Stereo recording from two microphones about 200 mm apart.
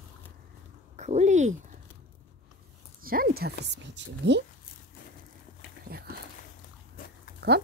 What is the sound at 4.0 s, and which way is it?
Speech, 60° right (ahead or behind).